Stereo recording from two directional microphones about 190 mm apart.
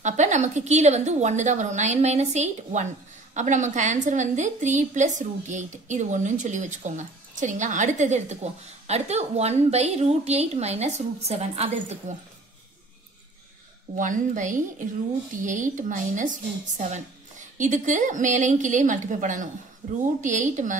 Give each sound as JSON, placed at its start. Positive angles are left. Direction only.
{"t": 0.0, "sound": "a woman's voice", "side_deg": -40}
{"t": 13.9, "sound": "a woman's voice", "side_deg": -45}